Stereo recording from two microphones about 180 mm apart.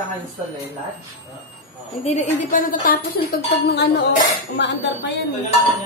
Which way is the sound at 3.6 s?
65° left (ahead or behind).